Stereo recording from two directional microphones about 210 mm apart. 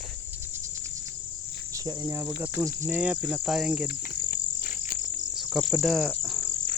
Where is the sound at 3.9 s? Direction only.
45° left (ahead or behind).